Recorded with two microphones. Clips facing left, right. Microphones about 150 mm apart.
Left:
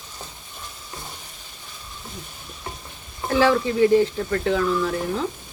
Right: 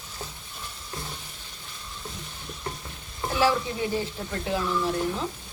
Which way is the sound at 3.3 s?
90° left.